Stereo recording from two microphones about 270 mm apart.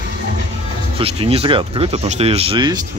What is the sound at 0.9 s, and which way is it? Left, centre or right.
Speech, right.